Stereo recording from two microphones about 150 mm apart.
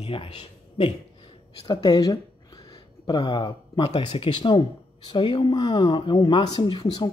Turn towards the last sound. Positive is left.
turn(degrees=30)  # may be behind; listen again after turning